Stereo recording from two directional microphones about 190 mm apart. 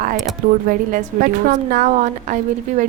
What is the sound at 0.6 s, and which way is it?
A woman's voice, 45° right (ahead or behind).